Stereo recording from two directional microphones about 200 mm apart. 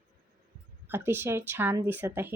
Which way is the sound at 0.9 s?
10° right (ahead or behind).